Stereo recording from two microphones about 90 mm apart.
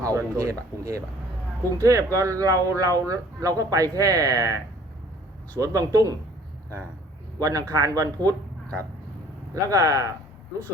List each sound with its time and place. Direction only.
0.0 s speech: 40° right (ahead or behind)
7.3 s speech: 40° right (ahead or behind)
9.6 s speech: 40° right (ahead or behind)